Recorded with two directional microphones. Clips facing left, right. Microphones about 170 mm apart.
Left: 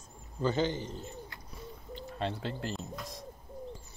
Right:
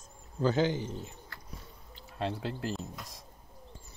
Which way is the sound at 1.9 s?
5° right (ahead or behind).